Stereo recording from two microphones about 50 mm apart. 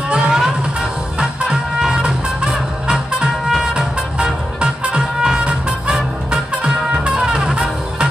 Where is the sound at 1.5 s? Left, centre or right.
Centre.